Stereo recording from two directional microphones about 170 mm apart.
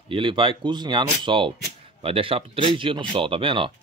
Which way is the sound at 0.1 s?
30° right (ahead or behind).